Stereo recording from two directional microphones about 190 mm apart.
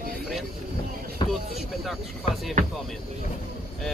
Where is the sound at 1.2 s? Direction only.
25° left (ahead or behind).